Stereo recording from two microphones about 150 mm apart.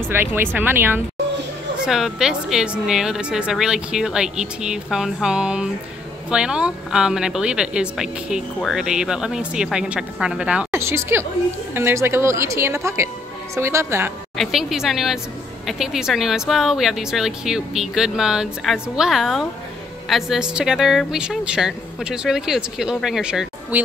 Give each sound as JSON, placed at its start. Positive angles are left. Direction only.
{"t": 0.1, "sound": "speech", "side_deg": -15}
{"t": 1.9, "sound": "speech", "side_deg": -5}
{"t": 14.3, "sound": "speech", "side_deg": 0}